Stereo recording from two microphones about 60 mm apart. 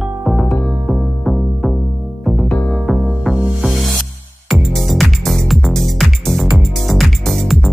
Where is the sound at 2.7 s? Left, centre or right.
Centre.